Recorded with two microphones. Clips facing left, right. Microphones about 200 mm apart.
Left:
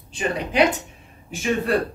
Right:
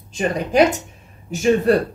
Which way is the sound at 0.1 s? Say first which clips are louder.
Right 5 dB; 45° right (ahead or behind).